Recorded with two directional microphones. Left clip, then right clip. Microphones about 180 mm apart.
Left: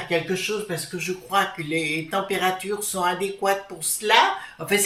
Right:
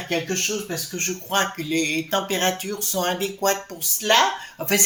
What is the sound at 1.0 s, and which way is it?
Speech, 45° right (ahead or behind).